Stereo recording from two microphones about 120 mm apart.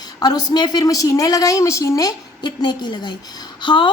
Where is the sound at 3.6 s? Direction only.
40° left (ahead or behind).